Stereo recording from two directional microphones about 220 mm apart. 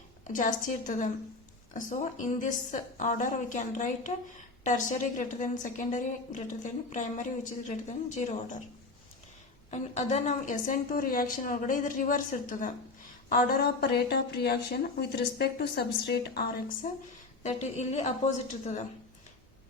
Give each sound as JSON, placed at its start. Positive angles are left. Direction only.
{"t": 0.3, "sound": "a woman's voice", "side_deg": 35}
{"t": 9.6, "sound": "a woman's voice", "side_deg": 30}